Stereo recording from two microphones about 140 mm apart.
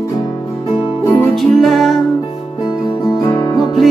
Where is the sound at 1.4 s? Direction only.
Centre (ahead or behind).